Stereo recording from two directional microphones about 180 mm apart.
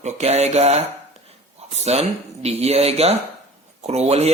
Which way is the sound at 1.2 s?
35° right (ahead or behind).